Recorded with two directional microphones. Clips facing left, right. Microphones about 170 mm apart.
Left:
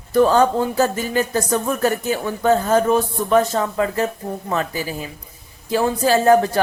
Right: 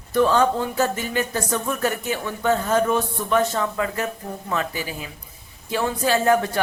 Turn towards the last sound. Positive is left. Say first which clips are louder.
# left 5 dB
turn(degrees=35)  # may be behind; listen again after turning